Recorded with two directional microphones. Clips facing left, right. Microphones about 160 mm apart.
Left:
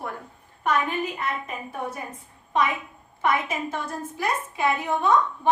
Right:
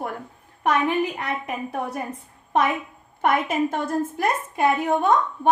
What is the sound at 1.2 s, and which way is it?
Speech, 70° right (ahead or behind).